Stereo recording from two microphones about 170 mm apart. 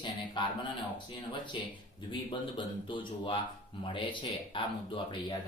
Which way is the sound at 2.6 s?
30° left (ahead or behind).